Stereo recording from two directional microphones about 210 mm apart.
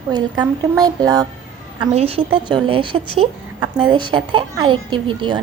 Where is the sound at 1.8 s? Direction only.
30° right (ahead or behind).